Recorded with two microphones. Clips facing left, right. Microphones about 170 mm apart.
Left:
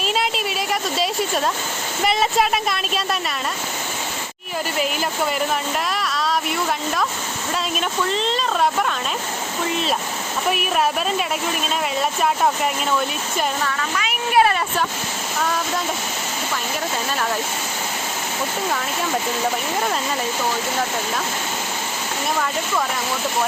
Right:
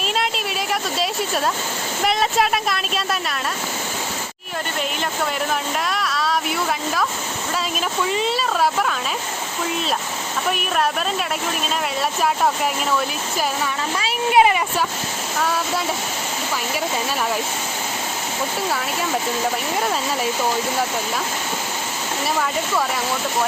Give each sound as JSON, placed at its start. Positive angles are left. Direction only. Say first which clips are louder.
{"t": 0.2, "sound": "a woman's voice", "louder": "left 1 dB", "side_deg": 0}
{"t": 5.9, "sound": "speech", "louder": "right 1 dB", "side_deg": 0}
{"t": 8.0, "sound": "speech", "louder": "right 2 dB", "side_deg": -10}
{"t": 10.5, "sound": "speech", "louder": "left 1 dB", "side_deg": 0}
{"t": 13.9, "sound": "speech", "louder": "right 2 dB", "side_deg": -30}